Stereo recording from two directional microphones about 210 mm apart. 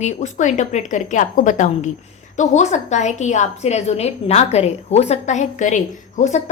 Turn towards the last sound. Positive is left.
turn(degrees=35)  # may be behind; listen again after turning